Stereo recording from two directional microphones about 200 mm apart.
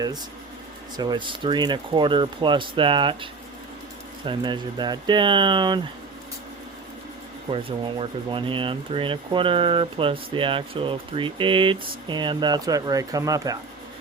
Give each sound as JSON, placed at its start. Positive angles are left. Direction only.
{"t": 0.9, "sound": "speech", "side_deg": -20}
{"t": 4.3, "sound": "speech", "side_deg": -20}
{"t": 7.5, "sound": "speech", "side_deg": -25}